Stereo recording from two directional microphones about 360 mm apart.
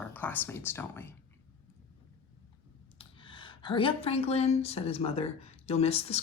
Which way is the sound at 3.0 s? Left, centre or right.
Centre.